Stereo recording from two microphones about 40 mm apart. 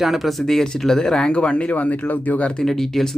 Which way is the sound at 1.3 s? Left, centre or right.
Left.